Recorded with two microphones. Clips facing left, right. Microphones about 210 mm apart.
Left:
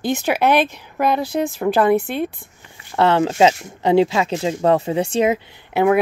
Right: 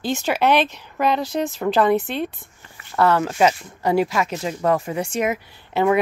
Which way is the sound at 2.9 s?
25° left (ahead or behind).